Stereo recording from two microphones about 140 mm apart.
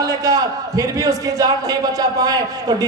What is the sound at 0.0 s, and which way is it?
A man's voice, 25° right (ahead or behind).